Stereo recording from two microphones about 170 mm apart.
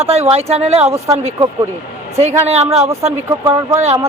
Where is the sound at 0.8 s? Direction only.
15° right (ahead or behind).